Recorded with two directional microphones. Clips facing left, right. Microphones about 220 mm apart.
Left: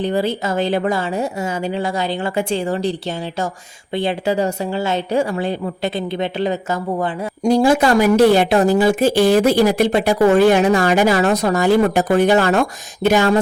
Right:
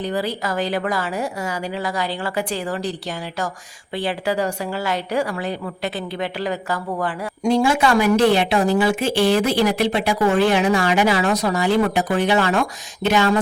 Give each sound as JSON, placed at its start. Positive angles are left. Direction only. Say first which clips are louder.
{"t": 0.0, "sound": "speech", "louder": "left 5 dB", "side_deg": 25}
{"t": 3.9, "sound": "speech", "louder": "left 4 dB", "side_deg": 25}
{"t": 7.4, "sound": "speech", "louder": "left 4 dB", "side_deg": 40}
{"t": 9.1, "sound": "speech", "louder": "left 2 dB", "side_deg": 10}
{"t": 9.6, "sound": "speech", "louder": "left 4 dB", "side_deg": 45}